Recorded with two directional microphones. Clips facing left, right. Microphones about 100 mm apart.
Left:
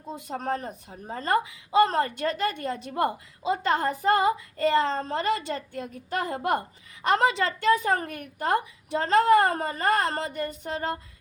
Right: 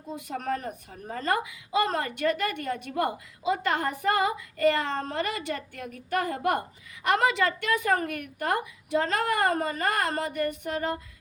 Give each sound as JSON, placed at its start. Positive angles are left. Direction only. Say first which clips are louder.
{"t": 0.2, "sound": "a woman's voice", "louder": "left 1 dB", "side_deg": 30}